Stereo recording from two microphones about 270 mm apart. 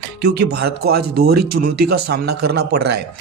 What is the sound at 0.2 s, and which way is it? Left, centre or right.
A man's voice, right.